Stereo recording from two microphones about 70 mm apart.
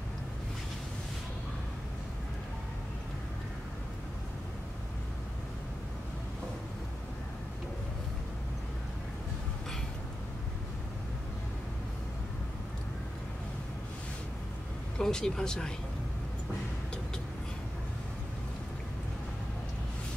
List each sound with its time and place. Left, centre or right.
15.0 s speech: centre